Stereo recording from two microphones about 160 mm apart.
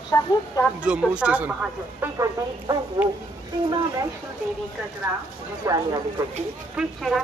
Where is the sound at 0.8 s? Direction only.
5° right (ahead or behind).